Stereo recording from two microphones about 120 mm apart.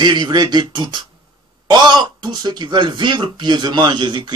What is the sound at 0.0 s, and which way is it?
A man's voice, 35° right (ahead or behind).